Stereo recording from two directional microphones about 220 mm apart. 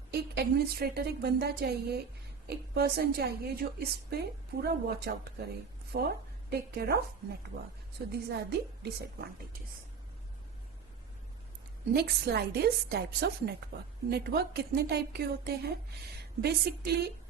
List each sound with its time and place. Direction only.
0.1 s a woman's voice: 45° right (ahead or behind)
8.1 s a woman's voice: 50° right (ahead or behind)
11.9 s a woman's voice: 50° right (ahead or behind)